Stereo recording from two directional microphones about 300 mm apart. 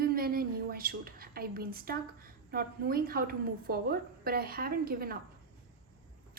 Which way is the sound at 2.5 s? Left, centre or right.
Right.